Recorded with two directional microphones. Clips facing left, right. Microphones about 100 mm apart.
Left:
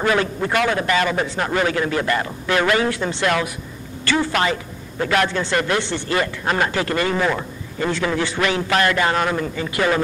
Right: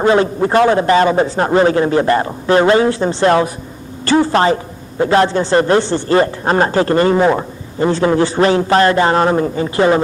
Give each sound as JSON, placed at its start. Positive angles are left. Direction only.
{"t": 0.0, "sound": "a man's voice", "side_deg": -30}